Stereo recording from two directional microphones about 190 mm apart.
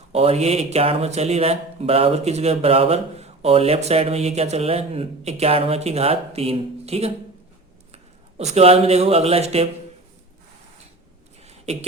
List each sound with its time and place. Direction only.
0.1 s speech: 35° right (ahead or behind)
8.4 s speech: 35° right (ahead or behind)
11.4 s a sound: 35° right (ahead or behind)